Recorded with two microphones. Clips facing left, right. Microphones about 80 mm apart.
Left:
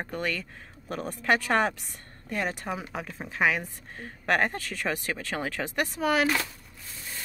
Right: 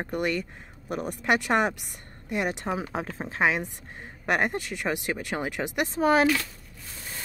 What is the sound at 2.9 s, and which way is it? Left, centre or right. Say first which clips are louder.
Speech: right 4 dB; right.